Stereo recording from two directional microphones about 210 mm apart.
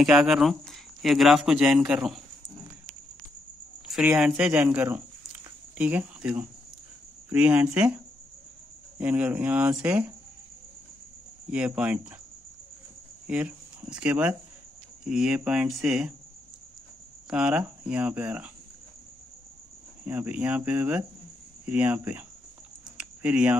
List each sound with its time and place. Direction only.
0.0 s speech: 5° right (ahead or behind)
3.8 s cricket: centre (ahead or behind)
4.3 s speech: 5° right (ahead or behind)
8.9 s speech: 5° right (ahead or behind)
11.5 s speech: 5° right (ahead or behind)
13.3 s speech: 5° right (ahead or behind)
17.3 s speech: 5° right (ahead or behind)
20.1 s speech: 5° right (ahead or behind)
22.9 s a sound: 5° right (ahead or behind)